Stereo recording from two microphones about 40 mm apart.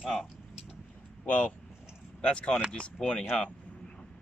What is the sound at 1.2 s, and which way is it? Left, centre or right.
Speech, left.